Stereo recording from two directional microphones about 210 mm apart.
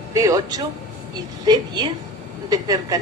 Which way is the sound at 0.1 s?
15° right (ahead or behind).